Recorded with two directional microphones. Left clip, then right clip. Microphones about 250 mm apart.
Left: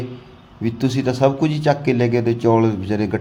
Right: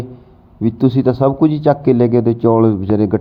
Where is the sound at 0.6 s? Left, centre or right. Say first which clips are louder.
Right 6 dB; centre.